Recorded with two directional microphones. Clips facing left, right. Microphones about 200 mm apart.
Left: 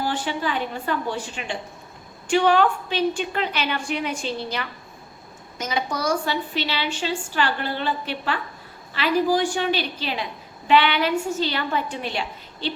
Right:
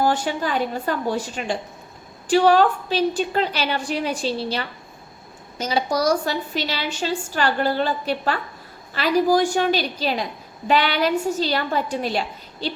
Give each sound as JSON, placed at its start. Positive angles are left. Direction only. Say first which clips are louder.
{"t": 0.0, "sound": "a woman's voice", "louder": "right 4 dB", "side_deg": -45}